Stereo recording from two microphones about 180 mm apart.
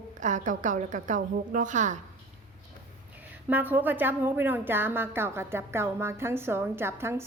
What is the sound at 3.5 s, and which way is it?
A woman's voice, 10° right (ahead or behind).